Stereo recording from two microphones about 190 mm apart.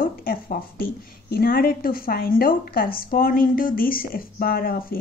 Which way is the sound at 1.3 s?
50° left (ahead or behind).